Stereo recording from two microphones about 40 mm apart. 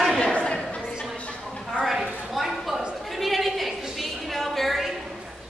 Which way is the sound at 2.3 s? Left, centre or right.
Centre.